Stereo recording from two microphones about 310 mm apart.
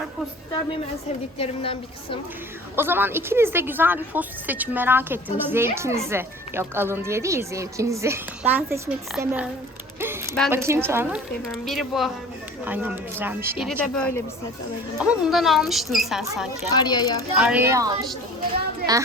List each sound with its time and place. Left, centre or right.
1.4 s a woman's voice: centre
2.7 s speech: centre
16.6 s a woman's voice: centre
17.3 s speech: centre